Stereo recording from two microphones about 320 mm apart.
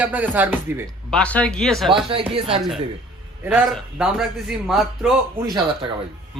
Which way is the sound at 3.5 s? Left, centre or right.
Centre.